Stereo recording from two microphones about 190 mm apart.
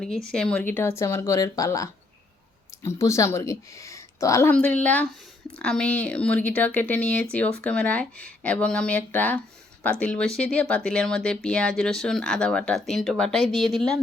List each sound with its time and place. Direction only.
0.3 s a woman's voice: 5° left (ahead or behind)